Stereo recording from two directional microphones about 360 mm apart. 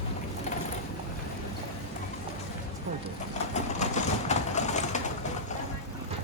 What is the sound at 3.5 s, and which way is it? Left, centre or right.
Vehicle, centre.